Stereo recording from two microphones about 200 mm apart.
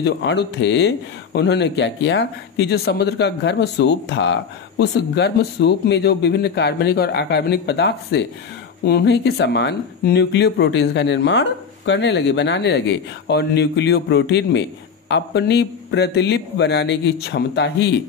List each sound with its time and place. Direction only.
0.0 s speech: 60° left (ahead or behind)